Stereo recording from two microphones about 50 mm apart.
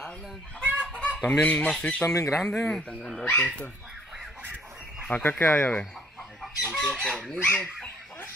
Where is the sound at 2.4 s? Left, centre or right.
Centre.